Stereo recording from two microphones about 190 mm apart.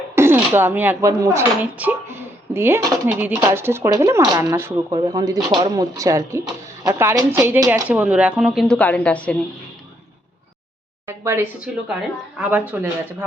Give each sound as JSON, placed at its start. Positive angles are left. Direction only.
{"t": 0.2, "sound": "speech", "side_deg": -10}
{"t": 8.6, "sound": "a woman's voice", "side_deg": 5}
{"t": 11.2, "sound": "speech", "side_deg": -15}